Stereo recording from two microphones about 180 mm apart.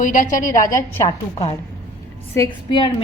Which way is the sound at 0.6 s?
15° left (ahead or behind).